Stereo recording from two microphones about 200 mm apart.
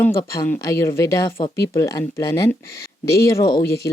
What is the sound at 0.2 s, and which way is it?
Speech, 15° left (ahead or behind).